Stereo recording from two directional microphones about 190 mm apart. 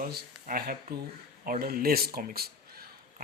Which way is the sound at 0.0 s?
50° right (ahead or behind).